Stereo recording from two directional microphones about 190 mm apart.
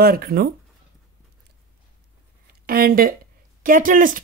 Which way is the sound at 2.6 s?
50° right (ahead or behind).